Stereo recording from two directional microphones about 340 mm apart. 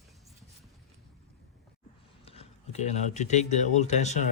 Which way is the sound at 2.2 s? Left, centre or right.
Centre.